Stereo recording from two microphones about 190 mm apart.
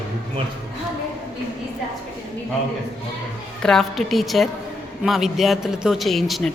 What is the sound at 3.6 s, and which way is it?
A woman's voice, 5° left (ahead or behind).